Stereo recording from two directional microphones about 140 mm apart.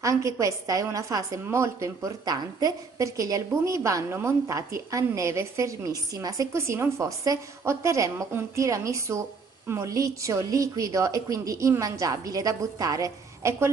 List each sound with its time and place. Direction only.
0.0 s a woman's voice: 25° right (ahead or behind)